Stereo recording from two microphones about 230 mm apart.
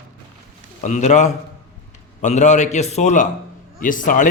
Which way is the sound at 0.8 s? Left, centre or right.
Left.